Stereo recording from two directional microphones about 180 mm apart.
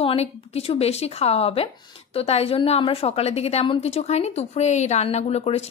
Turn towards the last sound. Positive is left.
turn(degrees=35)  # may be behind; listen again after turning